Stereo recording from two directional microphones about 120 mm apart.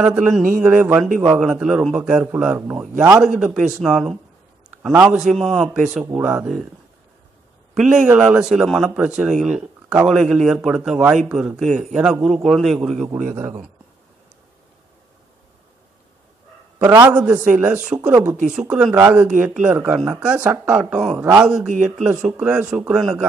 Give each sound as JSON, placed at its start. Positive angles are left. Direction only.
{"t": 0.0, "sound": "speech", "side_deg": -15}
{"t": 3.1, "sound": "speech", "side_deg": -5}
{"t": 5.0, "sound": "a man's voice", "side_deg": -5}
{"t": 7.7, "sound": "a man's voice", "side_deg": -5}
{"t": 16.7, "sound": "a man's voice", "side_deg": -25}
{"t": 17.1, "sound": "speech", "side_deg": -10}